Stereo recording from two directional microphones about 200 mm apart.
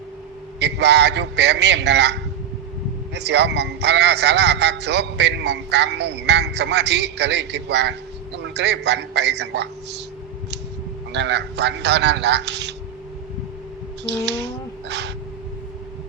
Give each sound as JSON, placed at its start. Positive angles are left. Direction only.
{"t": 0.6, "sound": "a man's voice", "side_deg": -60}
{"t": 3.2, "sound": "a man's voice", "side_deg": -60}
{"t": 11.1, "sound": "a man's voice", "side_deg": -60}
{"t": 14.0, "sound": "speech", "side_deg": -60}